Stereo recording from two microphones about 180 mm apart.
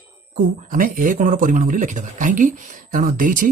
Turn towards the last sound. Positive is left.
turn(degrees=-45)  # may be behind; listen again after turning